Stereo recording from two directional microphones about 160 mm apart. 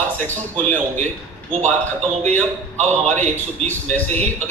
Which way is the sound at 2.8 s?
45° right (ahead or behind).